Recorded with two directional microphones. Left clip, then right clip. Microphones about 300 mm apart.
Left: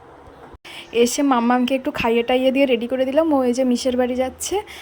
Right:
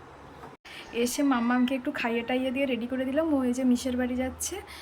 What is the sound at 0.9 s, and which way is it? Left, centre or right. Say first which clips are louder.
A woman's voice: left 10 dB; centre.